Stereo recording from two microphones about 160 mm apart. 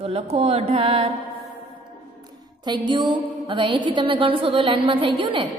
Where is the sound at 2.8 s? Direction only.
30° right (ahead or behind).